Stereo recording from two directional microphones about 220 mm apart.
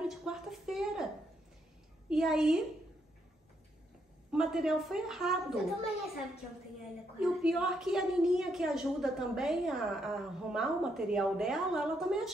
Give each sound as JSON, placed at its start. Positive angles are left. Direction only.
{"t": 0.2, "sound": "a sound", "side_deg": 0}
{"t": 2.0, "sound": "a woman's voice", "side_deg": 0}
{"t": 4.3, "sound": "a woman's voice", "side_deg": 0}
{"t": 7.2, "sound": "a woman's voice", "side_deg": 0}